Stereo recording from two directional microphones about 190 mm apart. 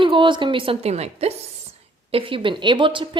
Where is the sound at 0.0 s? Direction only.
25° right (ahead or behind).